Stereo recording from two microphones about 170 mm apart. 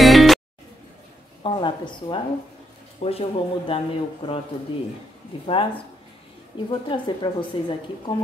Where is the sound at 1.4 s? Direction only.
30° left (ahead or behind).